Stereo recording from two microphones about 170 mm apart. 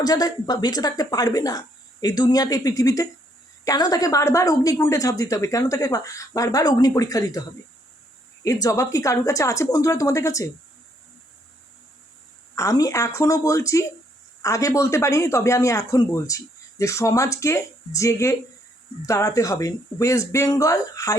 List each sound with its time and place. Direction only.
0.0 s speech: 20° left (ahead or behind)
8.4 s speech: 20° left (ahead or behind)
12.5 s speech: 20° left (ahead or behind)